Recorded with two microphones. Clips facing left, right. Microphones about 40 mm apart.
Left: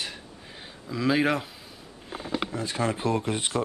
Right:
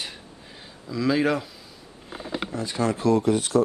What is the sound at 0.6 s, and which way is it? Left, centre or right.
Speech, left.